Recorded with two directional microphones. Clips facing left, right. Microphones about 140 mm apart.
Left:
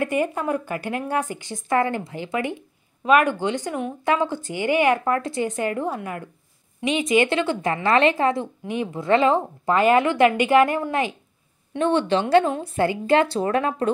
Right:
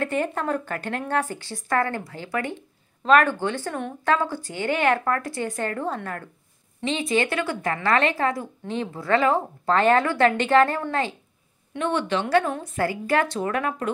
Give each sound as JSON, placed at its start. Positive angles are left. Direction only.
{"t": 0.0, "sound": "speech", "side_deg": 10}
{"t": 11.7, "sound": "speech", "side_deg": 25}